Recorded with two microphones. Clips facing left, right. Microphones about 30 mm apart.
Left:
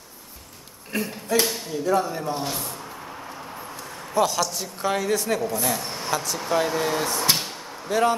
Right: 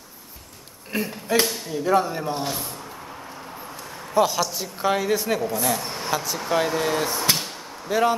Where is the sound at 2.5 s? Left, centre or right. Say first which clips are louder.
Right 1 dB; centre.